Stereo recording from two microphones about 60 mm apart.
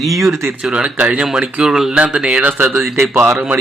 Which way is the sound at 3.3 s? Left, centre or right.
Right.